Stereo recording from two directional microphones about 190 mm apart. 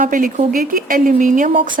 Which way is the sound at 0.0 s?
45° right (ahead or behind).